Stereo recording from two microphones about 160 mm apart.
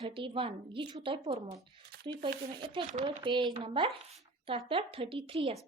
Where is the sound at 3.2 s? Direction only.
30° right (ahead or behind).